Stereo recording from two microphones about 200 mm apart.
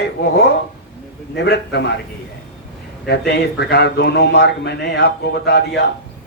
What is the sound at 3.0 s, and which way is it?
Speech, 55° left (ahead or behind).